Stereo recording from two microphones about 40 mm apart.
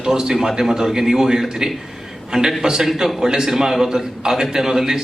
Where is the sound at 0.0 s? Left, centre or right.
Centre.